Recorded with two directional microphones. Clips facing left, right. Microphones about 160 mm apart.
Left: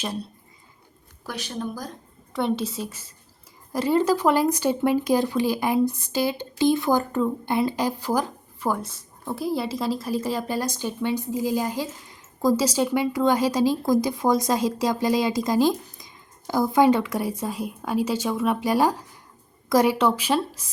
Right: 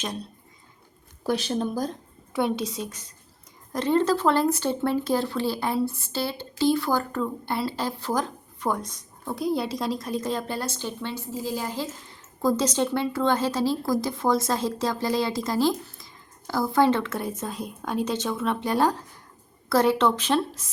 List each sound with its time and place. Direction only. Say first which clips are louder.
1.2 s speech: right 6 dB; 30° right (ahead or behind)
2.3 s a woman's voice: left 1 dB; centre (ahead or behind)